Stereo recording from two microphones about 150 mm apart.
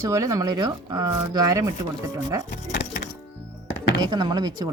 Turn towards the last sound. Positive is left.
turn(degrees=-30)  # may be behind; listen again after turning